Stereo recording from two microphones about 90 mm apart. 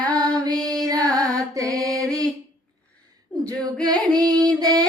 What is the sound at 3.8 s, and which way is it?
Female singing, 45° right (ahead or behind).